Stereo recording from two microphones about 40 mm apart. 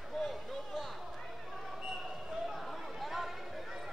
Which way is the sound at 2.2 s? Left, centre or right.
Centre.